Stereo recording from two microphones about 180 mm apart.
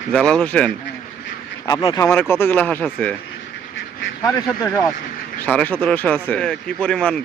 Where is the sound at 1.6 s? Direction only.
20° left (ahead or behind).